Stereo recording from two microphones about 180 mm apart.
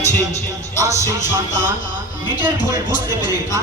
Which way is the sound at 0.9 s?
40° left (ahead or behind).